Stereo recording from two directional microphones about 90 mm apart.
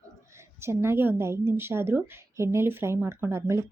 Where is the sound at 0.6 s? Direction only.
30° right (ahead or behind).